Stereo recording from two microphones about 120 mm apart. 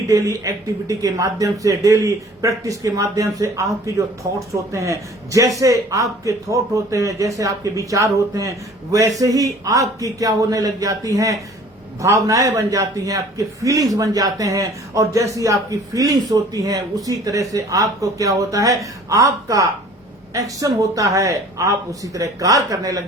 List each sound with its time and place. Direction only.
0.1 s speech: 25° right (ahead or behind)